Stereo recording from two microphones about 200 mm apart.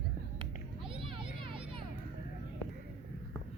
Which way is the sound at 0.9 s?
25° right (ahead or behind).